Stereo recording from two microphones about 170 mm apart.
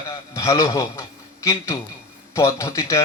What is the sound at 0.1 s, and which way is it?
A man's voice, 20° left (ahead or behind).